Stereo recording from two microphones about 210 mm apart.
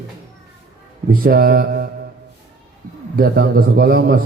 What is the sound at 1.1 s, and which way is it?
Speech, 45° right (ahead or behind).